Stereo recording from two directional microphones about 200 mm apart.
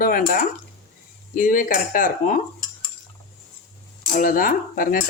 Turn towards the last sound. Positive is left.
turn(degrees=45)  # may be behind; listen again after turning